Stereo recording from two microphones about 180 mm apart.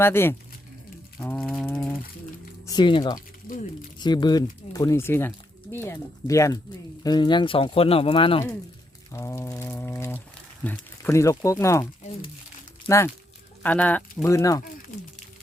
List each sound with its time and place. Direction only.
0.0 s speech: 15° left (ahead or behind)
1.6 s a sound: 10° left (ahead or behind)
2.6 s speech: 25° left (ahead or behind)
3.2 s a sound: 50° left (ahead or behind)
3.9 s speech: 25° left (ahead or behind)
9.1 s pour: 15° left (ahead or behind)
10.6 s speech: 10° left (ahead or behind)
13.6 s speech: 10° left (ahead or behind)